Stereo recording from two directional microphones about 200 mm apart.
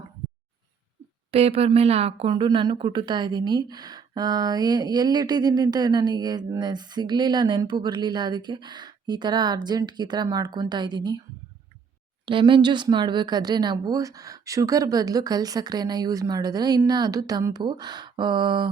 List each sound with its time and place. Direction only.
1.3 s speech: 30° right (ahead or behind)
12.2 s speech: 25° right (ahead or behind)